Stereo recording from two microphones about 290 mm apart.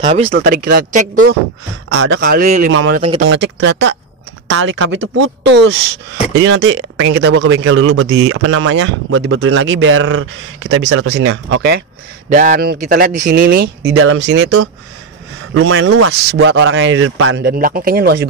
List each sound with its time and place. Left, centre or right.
0.0 s speech: centre
0.3 s speech: right
1.9 s speech: right
2.7 s a man's voice: right
12.3 s a man's voice: right